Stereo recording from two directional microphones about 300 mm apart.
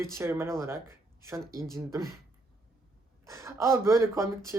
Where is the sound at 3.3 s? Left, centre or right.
Centre.